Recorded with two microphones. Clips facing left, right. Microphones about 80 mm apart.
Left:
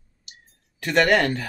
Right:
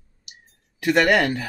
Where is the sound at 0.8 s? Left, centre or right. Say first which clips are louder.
Right 1 dB; centre.